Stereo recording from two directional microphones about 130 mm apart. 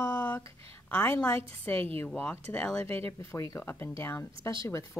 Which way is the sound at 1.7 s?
50° right (ahead or behind).